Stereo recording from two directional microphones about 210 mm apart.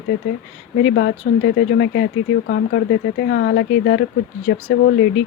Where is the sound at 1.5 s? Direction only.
50° left (ahead or behind).